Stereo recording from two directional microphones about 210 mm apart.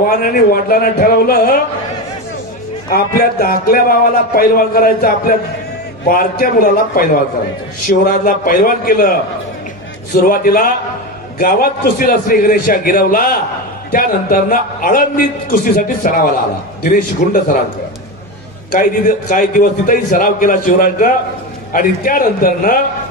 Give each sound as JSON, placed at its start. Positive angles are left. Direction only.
{"t": 0.0, "sound": "speech", "side_deg": 45}
{"t": 2.9, "sound": "a man's voice", "side_deg": 45}
{"t": 10.2, "sound": "a man's voice", "side_deg": 40}
{"t": 18.7, "sound": "a man's voice", "side_deg": 40}